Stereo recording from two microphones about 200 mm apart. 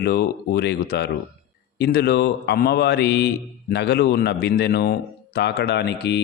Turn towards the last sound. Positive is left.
turn(degrees=55)  # may be behind; listen again after turning